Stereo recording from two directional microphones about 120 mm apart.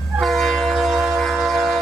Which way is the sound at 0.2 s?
Centre (ahead or behind).